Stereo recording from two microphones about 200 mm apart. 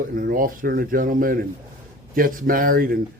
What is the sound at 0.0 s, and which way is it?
Speech, 45° right (ahead or behind).